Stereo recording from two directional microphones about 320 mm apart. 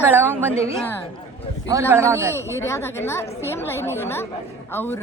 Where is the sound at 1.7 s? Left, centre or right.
Centre.